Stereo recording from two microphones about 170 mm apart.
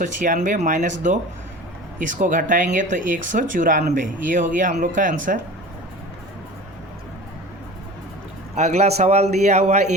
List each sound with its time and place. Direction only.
0.0 s speech: 50° right (ahead or behind)
2.0 s speech: 50° right (ahead or behind)
8.5 s a man's voice: 40° right (ahead or behind)